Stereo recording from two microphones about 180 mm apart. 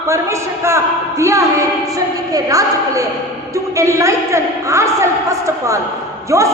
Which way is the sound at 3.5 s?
15° right (ahead or behind).